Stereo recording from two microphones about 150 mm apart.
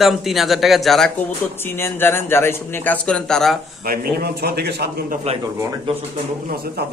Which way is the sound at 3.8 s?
85° right.